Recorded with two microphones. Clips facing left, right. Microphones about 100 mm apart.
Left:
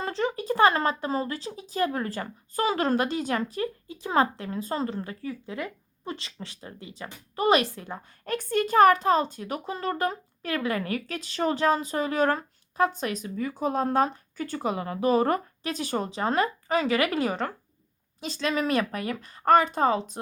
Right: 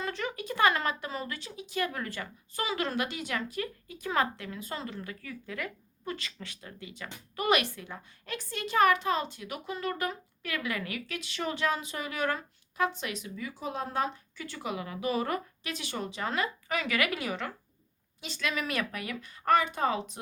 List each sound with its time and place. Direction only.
0.0 s speech: 30° left (ahead or behind)